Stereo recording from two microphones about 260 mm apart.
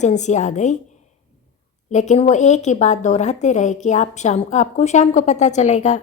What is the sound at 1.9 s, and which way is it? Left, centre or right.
A woman's voice, left.